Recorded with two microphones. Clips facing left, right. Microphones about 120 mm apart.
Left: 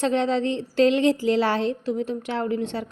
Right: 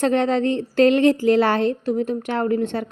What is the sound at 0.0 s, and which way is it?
A woman's voice, 55° right (ahead or behind).